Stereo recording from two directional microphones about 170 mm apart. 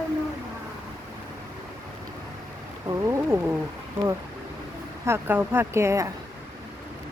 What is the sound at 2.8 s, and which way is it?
Speech, 20° right (ahead or behind).